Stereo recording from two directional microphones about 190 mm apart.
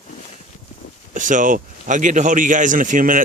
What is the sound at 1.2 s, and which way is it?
A man's voice, 45° right (ahead or behind).